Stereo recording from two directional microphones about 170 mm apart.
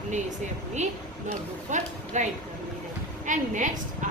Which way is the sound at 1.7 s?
45° right (ahead or behind).